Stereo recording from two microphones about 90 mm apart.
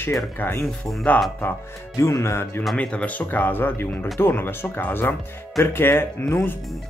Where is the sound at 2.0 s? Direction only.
35° left (ahead or behind).